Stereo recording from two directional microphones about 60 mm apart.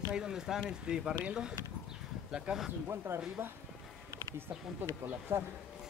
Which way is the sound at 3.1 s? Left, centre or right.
Right.